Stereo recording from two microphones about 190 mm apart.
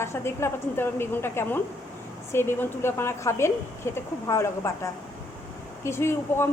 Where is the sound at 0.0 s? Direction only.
15° left (ahead or behind).